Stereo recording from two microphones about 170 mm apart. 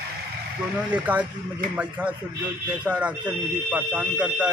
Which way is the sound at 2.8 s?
5° right (ahead or behind).